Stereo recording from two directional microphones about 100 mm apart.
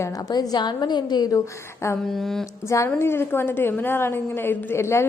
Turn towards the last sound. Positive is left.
turn(degrees=25)  # may be behind; listen again after turning